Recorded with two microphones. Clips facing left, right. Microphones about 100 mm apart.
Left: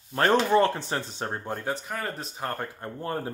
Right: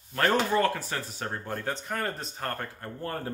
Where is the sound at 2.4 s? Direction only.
15° left (ahead or behind).